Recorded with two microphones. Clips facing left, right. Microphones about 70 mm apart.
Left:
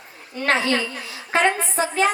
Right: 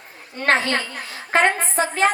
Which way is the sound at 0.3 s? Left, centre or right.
Right.